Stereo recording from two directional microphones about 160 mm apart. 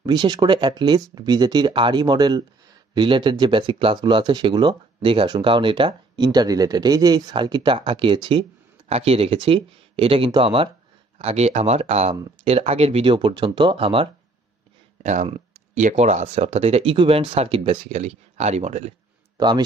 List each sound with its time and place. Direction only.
0.0 s speech: 25° right (ahead or behind)
15.2 s a sound: 35° right (ahead or behind)
15.8 s speech: 45° right (ahead or behind)
19.3 s speech: 25° right (ahead or behind)